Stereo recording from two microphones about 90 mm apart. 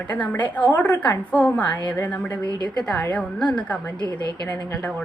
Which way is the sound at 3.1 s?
15° left (ahead or behind).